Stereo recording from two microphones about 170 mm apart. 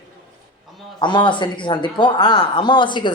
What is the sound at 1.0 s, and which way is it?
Speech, 25° left (ahead or behind).